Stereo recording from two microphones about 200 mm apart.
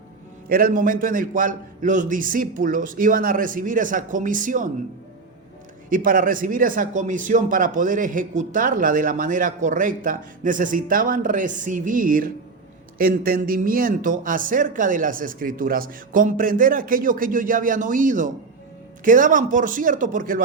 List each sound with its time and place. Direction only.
0.4 s a man's voice: 45° right (ahead or behind)
5.9 s a man's voice: 45° right (ahead or behind)